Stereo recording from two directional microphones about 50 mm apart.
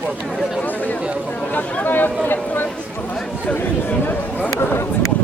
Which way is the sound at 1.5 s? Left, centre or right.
Left.